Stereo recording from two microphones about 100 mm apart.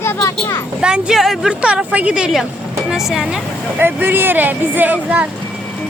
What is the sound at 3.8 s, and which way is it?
Speech, 20° right (ahead or behind).